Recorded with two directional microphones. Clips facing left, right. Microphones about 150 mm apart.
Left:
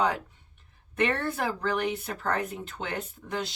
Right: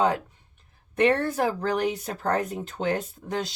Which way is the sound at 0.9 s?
35° right (ahead or behind).